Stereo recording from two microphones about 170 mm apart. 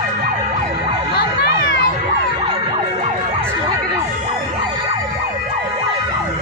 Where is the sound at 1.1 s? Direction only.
70° left (ahead or behind).